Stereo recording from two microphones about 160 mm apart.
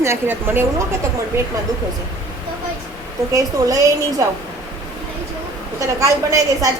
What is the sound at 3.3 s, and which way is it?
A woman's voice, 20° right (ahead or behind).